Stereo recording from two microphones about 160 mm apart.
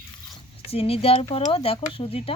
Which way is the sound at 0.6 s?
40° left (ahead or behind).